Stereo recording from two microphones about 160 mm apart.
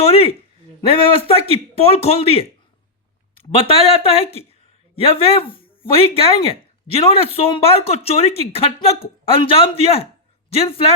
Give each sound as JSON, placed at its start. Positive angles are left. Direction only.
{"t": 0.0, "sound": "speech", "side_deg": 40}